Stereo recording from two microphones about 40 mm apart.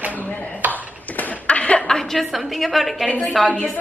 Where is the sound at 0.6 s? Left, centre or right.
Right.